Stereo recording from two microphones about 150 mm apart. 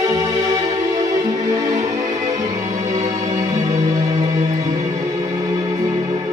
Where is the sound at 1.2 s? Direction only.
25° right (ahead or behind).